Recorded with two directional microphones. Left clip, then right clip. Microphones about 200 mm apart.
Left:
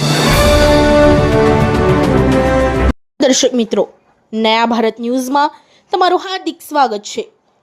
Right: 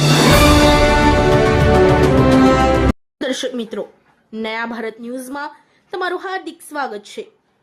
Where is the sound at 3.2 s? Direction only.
30° left (ahead or behind).